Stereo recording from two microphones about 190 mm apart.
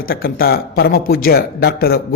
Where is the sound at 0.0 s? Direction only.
50° left (ahead or behind).